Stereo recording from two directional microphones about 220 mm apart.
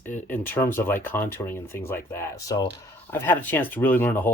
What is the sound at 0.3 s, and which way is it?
Speech, 10° left (ahead or behind).